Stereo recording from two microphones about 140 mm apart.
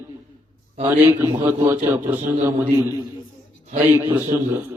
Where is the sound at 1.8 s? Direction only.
15° right (ahead or behind).